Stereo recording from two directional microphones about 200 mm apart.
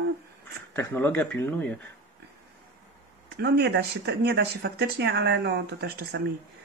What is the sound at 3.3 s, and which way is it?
Speech, 55° right (ahead or behind).